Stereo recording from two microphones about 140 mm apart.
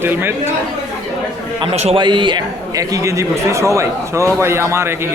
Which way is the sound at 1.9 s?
35° right (ahead or behind).